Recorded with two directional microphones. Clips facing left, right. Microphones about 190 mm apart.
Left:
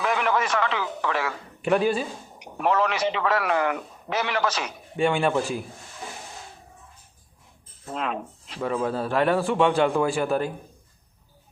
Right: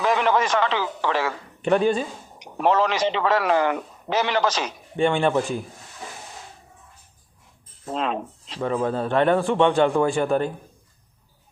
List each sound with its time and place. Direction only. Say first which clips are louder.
0.0 s a man's voice: right 3 dB; 30° right (ahead or behind)
1.6 s a man's voice: right 2 dB; 5° left (ahead or behind)
2.6 s a man's voice: right 3 dB; 30° right (ahead or behind)
4.9 s a man's voice: right 2 dB; centre (ahead or behind)
7.9 s speech: right 3 dB; 30° right (ahead or behind)
8.6 s a man's voice: right 2 dB; 5° left (ahead or behind)